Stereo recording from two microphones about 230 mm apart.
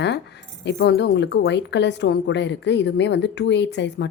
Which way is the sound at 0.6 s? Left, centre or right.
Left.